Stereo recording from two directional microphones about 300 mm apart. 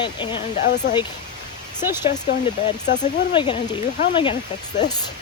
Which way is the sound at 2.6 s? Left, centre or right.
Left.